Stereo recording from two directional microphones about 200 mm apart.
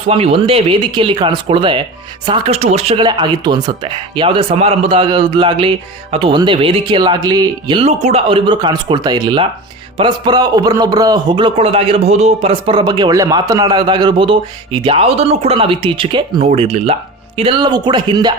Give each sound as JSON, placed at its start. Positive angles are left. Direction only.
{"t": 0.1, "sound": "speech", "side_deg": -30}